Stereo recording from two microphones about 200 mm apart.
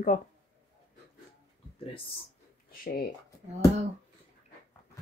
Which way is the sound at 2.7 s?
45° left (ahead or behind).